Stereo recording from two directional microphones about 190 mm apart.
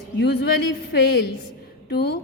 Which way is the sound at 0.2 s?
65° left (ahead or behind).